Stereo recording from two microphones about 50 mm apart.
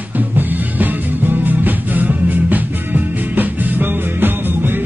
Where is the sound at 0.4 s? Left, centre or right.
Right.